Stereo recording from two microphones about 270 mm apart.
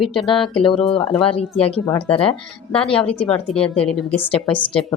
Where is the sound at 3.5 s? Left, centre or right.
Centre.